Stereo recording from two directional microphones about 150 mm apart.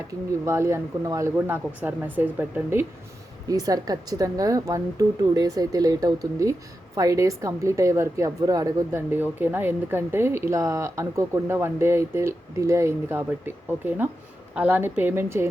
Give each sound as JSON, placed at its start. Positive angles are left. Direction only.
{"t": 0.1, "sound": "a woman's voice", "side_deg": -20}